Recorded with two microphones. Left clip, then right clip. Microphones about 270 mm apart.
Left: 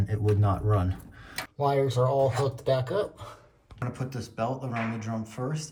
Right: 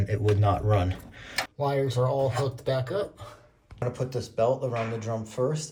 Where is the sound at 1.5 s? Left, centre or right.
Centre.